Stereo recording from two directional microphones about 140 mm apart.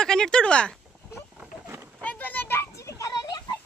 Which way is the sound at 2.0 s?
10° left (ahead or behind).